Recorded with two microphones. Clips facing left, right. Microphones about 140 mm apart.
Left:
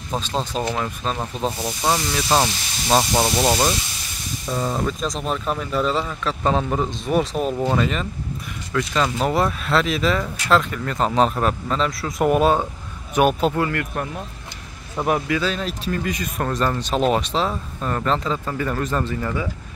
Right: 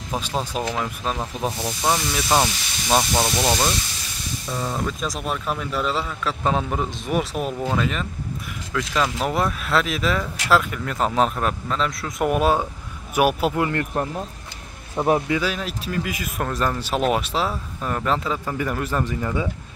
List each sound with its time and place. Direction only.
0.1 s speech: 10° right (ahead or behind)
13.6 s speech: 25° right (ahead or behind)
15.0 s speech: 25° right (ahead or behind)
15.4 s speech: 5° right (ahead or behind)